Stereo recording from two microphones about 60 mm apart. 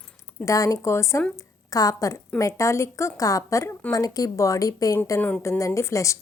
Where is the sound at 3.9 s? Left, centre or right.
Left.